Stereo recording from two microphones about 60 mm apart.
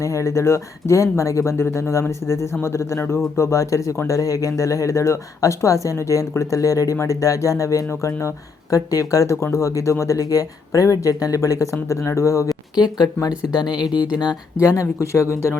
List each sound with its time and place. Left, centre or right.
0.0 s speech: left
6.9 s speech: left
8.7 s speech: left
13.4 s speech: centre
15.1 s speech: left